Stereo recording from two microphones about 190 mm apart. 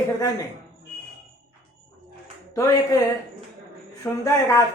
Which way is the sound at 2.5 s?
15° left (ahead or behind).